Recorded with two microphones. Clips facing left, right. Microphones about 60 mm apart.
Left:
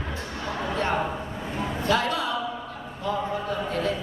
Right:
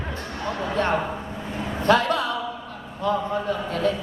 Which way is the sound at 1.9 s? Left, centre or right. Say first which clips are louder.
Right 5 dB; right.